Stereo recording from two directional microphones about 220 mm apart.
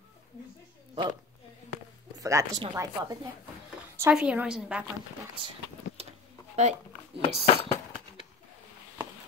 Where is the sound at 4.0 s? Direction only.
5° right (ahead or behind).